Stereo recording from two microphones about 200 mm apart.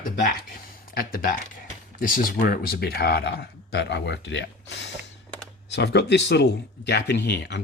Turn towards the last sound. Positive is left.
turn(degrees=60)  # may be behind; listen again after turning